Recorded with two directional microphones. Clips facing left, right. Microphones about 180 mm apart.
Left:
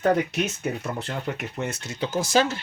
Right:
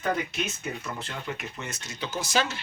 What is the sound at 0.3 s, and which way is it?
Speech, 65° left (ahead or behind).